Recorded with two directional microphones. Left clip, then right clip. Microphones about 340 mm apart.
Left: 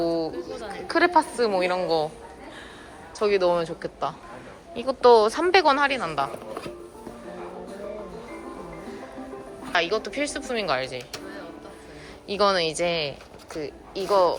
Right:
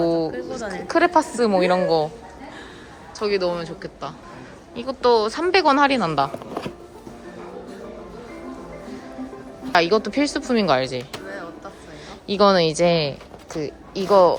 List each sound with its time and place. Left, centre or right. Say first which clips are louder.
0.0 s a sound: right 4 dB; centre
0.3 s a sound: right 5 dB; right
0.9 s speech: right 2 dB; centre
3.2 s speech: left 1 dB; centre
9.7 s speech: right 6 dB; centre
12.3 s speech: right 5 dB; centre